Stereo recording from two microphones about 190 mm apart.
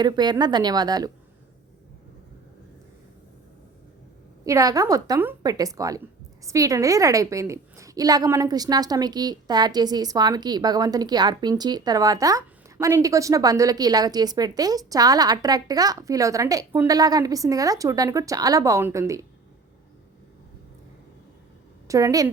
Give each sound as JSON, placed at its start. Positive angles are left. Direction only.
{"t": 0.0, "sound": "a woman's voice", "side_deg": -20}
{"t": 4.4, "sound": "a woman's voice", "side_deg": -20}
{"t": 21.8, "sound": "a woman's voice", "side_deg": -15}